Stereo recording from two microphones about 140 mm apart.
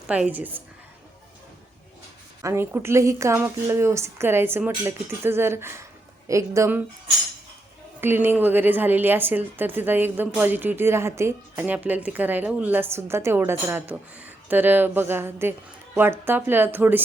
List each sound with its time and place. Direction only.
0.1 s a woman's voice: 10° right (ahead or behind)
2.4 s a woman's voice: 20° right (ahead or behind)
8.0 s a woman's voice: 15° right (ahead or behind)